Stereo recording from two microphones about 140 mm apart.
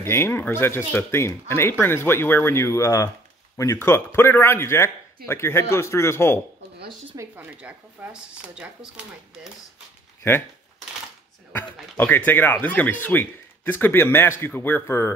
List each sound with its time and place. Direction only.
0.1 s a man's voice: 15° left (ahead or behind)
7.2 s speech: 15° right (ahead or behind)
11.5 s speech: 15° left (ahead or behind)